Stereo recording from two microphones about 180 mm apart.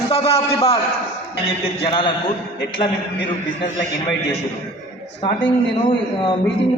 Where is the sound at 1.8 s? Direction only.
30° left (ahead or behind).